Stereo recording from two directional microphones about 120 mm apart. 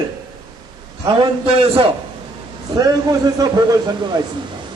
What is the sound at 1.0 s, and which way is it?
Speech, 45° right (ahead or behind).